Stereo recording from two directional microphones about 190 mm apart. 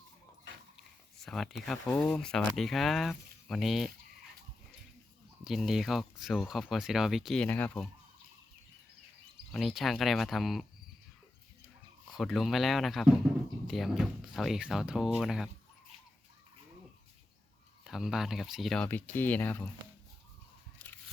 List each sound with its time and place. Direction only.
1.2 s speech: centre (ahead or behind)
5.5 s speech: centre (ahead or behind)
9.5 s speech: centre (ahead or behind)
12.1 s speech: centre (ahead or behind)
17.8 s speech: centre (ahead or behind)
20.8 s scissors: 5° left (ahead or behind)